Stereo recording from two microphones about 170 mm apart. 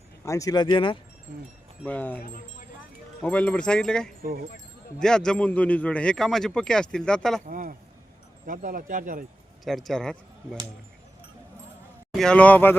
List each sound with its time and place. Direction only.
0.3 s speech: 20° left (ahead or behind)
1.8 s speech: 10° left (ahead or behind)
2.2 s speech: 55° left (ahead or behind)
3.2 s a man's voice: 10° left (ahead or behind)
4.2 s speech: 65° right (ahead or behind)
4.9 s a man's voice: 5° left (ahead or behind)
7.4 s speech: 50° right (ahead or behind)
9.6 s a man's voice: centre (ahead or behind)
12.1 s speech: 5° left (ahead or behind)